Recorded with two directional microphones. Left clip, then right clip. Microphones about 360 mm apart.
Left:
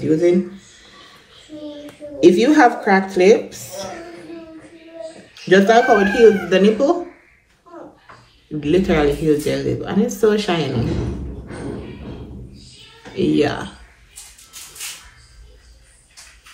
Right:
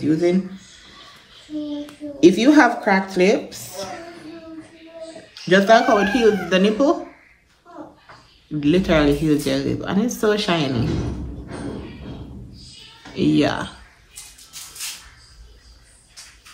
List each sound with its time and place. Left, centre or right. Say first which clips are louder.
0.0 s speech: left 3 dB; centre
2.1 s speech: left 1 dB; centre
5.3 s speech: left 1 dB; centre
8.5 s speech: left 1 dB; centre
13.1 s speech: left 1 dB; centre